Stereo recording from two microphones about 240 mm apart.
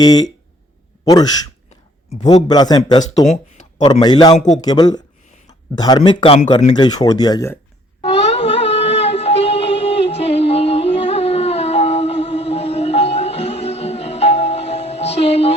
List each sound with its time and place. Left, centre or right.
0.0 s speech: centre
2.3 s speech: centre
3.0 s speech: left
3.8 s speech: centre
4.4 s speech: left
4.6 s speech: centre
8.0 s music: left